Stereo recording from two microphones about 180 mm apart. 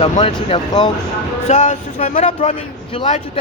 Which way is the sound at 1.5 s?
40° left (ahead or behind).